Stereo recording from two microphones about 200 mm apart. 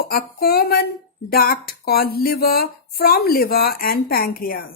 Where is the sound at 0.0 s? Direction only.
50° left (ahead or behind).